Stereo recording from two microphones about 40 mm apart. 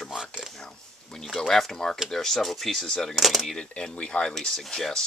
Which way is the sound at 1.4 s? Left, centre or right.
Centre.